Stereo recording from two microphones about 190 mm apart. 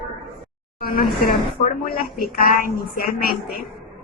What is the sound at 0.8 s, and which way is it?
A woman's voice, 50° left (ahead or behind).